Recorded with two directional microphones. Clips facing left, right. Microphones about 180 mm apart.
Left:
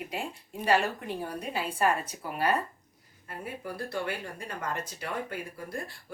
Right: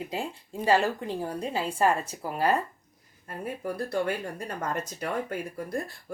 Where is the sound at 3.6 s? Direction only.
40° right (ahead or behind).